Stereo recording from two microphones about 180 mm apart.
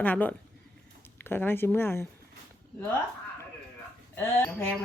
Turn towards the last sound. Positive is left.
turn(degrees=10)  # may be behind; listen again after turning